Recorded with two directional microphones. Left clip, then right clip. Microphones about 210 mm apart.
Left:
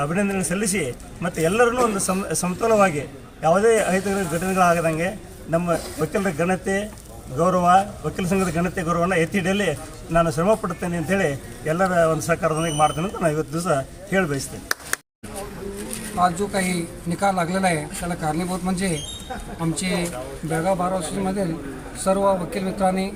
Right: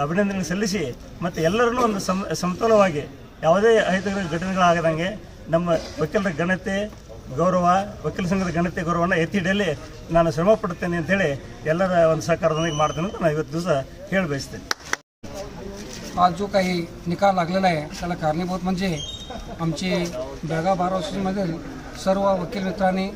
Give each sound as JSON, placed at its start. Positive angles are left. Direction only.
{"t": 0.0, "sound": "speech", "side_deg": 0}
{"t": 14.7, "sound": "a sound", "side_deg": -40}
{"t": 16.2, "sound": "speech", "side_deg": 0}